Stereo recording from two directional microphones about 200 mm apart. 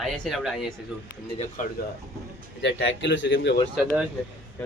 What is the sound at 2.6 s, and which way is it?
Speech, 60° left (ahead or behind).